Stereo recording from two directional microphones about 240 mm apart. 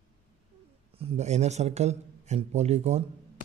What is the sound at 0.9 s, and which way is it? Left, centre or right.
A man's voice, right.